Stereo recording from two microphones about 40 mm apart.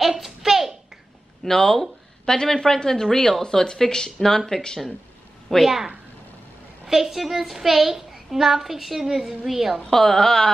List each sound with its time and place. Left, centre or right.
0.0 s a sound: centre
1.4 s speech: centre
6.9 s a woman's voice: centre
9.8 s speech: centre